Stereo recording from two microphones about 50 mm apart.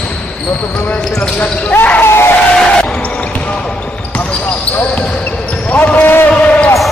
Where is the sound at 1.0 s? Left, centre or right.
Centre.